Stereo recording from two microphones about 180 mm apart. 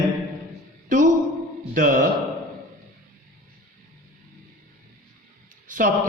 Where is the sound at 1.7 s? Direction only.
50° right (ahead or behind).